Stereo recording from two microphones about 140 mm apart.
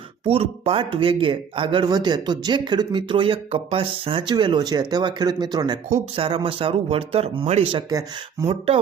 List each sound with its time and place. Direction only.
0.3 s speech: 45° right (ahead or behind)
6.1 s speech: 40° right (ahead or behind); by 8.4 s 25° right (ahead or behind)
8.4 s speech: 45° right (ahead or behind)